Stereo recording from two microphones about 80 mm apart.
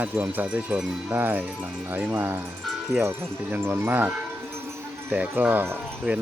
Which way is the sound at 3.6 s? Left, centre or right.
Right.